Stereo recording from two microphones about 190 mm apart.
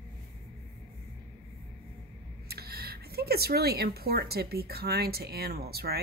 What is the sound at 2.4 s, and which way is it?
Speech, 55° right (ahead or behind).